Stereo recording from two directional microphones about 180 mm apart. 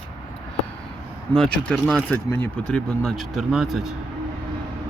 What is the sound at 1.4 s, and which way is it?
Speech, centre (ahead or behind).